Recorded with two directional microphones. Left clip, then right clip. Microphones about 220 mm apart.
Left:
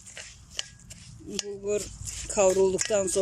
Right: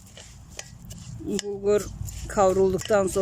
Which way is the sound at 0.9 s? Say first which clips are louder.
Right 9 dB; 5° right (ahead or behind).